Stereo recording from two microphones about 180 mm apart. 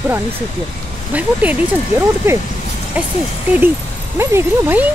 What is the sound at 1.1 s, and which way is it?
Speech, 10° right (ahead or behind).